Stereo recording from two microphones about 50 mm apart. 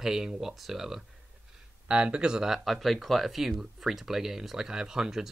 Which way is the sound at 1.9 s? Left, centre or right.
Centre.